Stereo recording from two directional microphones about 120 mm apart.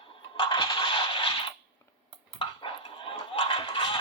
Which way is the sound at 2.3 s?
50° left (ahead or behind).